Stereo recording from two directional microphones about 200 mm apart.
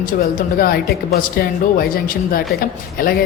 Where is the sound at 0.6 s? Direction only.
45° left (ahead or behind).